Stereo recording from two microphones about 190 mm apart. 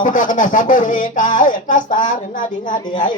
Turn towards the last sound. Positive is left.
turn(degrees=45)  # may be behind; listen again after turning